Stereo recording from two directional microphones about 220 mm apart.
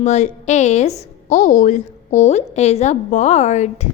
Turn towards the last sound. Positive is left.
turn(degrees=30)  # may be behind; listen again after turning